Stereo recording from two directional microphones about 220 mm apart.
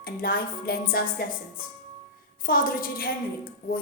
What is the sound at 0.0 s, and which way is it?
Speech, 45° left (ahead or behind).